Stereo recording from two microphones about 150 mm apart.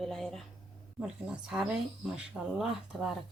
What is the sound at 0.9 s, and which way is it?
Speech, 5° right (ahead or behind).